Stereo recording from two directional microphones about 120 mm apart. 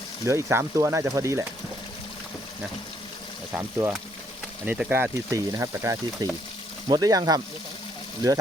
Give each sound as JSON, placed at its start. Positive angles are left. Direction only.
{"t": 0.3, "sound": "speech", "side_deg": -25}
{"t": 3.5, "sound": "speech", "side_deg": -20}
{"t": 5.3, "sound": "speech", "side_deg": -25}